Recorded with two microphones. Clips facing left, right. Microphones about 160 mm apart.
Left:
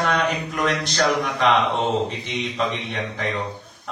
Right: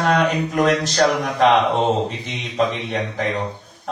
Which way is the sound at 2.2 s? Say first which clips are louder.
Right 3 dB; 40° right (ahead or behind).